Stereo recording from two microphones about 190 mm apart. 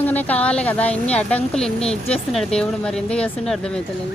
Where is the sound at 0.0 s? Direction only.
10° left (ahead or behind).